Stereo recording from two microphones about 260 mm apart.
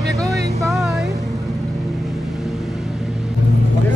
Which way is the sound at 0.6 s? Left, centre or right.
Centre.